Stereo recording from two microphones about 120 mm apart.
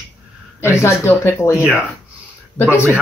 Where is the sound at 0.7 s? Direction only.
20° left (ahead or behind).